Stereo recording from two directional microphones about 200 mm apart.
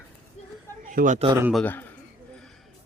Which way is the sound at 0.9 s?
40° right (ahead or behind).